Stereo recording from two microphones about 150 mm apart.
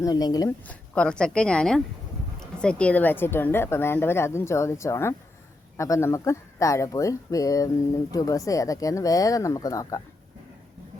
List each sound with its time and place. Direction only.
0.0 s speech: 25° left (ahead or behind)
0.7 s a woman's voice: 5° left (ahead or behind); by 10.0 s 20° left (ahead or behind)